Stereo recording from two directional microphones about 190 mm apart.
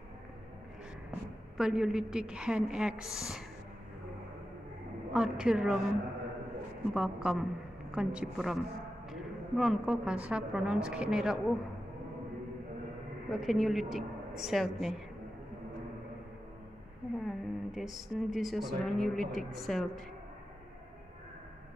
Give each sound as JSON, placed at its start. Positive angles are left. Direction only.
{"t": 1.6, "sound": "a woman's voice", "side_deg": -5}
{"t": 5.1, "sound": "a woman's voice", "side_deg": -5}
{"t": 6.9, "sound": "a woman's voice", "side_deg": -5}
{"t": 13.3, "sound": "a woman's voice", "side_deg": 0}
{"t": 17.3, "sound": "a woman's voice", "side_deg": 0}